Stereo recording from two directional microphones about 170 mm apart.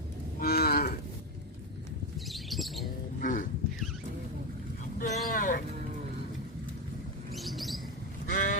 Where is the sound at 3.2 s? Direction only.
55° left (ahead or behind).